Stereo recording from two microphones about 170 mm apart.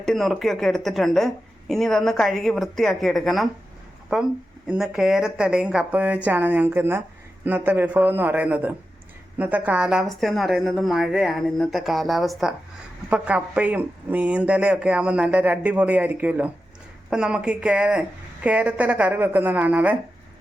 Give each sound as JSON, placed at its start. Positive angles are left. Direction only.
{"t": 0.0, "sound": "speech", "side_deg": 0}